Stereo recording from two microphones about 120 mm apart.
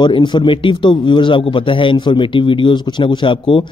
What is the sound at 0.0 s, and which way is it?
A man's voice, 40° left (ahead or behind).